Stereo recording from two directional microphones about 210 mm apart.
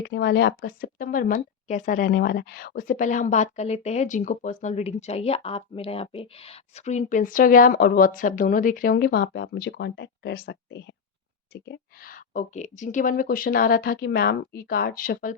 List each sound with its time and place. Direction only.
0.0 s a woman's voice: 55° left (ahead or behind)